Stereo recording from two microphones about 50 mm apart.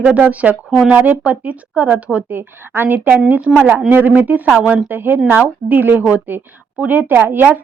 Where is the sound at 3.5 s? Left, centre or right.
Centre.